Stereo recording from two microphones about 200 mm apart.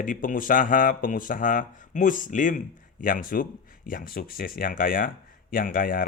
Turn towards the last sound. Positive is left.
turn(degrees=45)  # may be behind; listen again after turning